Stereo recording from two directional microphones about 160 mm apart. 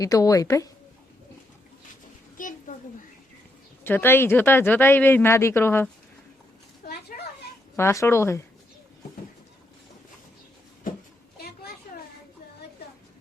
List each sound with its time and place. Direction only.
0.0 s a woman's voice: 20° left (ahead or behind)
2.4 s a sound: 55° left (ahead or behind)
3.8 s speech: 15° left (ahead or behind)
7.1 s children playing: 60° left (ahead or behind)
7.8 s speech: 15° left (ahead or behind)
11.3 s a sound: 75° left (ahead or behind)